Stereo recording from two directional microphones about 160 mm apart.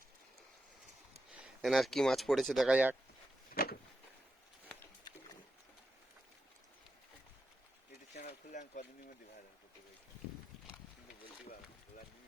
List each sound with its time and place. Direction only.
1.3 s speech: 5° right (ahead or behind)
3.5 s vehicle: 75° left (ahead or behind)
8.1 s a sound: 50° left (ahead or behind)